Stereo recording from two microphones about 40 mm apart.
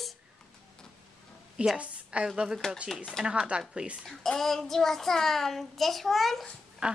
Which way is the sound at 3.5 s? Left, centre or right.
Right.